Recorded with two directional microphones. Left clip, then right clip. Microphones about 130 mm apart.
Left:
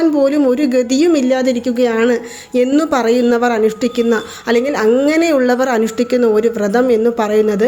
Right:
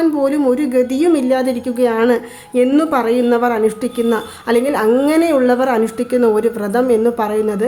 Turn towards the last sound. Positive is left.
turn(degrees=15)  # may be behind; listen again after turning